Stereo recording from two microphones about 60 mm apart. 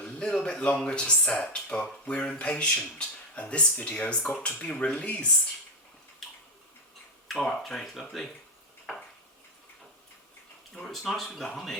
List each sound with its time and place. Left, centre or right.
0.0 s speech: centre
7.3 s speech: centre
10.9 s speech: centre